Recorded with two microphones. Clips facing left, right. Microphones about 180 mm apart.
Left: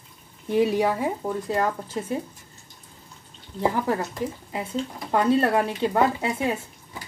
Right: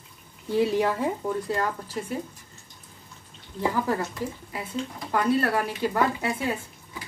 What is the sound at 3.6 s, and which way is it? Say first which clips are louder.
A woman's voice: left 2 dB; 20° left (ahead or behind).